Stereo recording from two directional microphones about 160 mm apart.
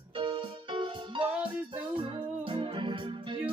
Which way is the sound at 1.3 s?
10° right (ahead or behind).